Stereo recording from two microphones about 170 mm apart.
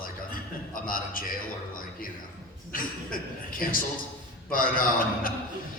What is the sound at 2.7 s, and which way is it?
A man's voice, 55° left (ahead or behind).